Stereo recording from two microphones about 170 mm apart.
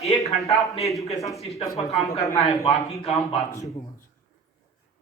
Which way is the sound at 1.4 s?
40° left (ahead or behind).